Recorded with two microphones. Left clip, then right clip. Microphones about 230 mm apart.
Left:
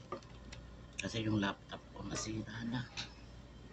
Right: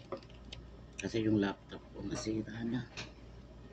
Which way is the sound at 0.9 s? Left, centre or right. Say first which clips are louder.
Right 5 dB; left.